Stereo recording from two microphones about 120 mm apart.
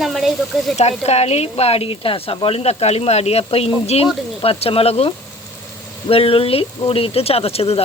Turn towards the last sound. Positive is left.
turn(degrees=55)  # may be behind; listen again after turning